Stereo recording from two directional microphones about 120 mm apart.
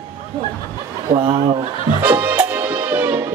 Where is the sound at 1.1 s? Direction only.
45° right (ahead or behind).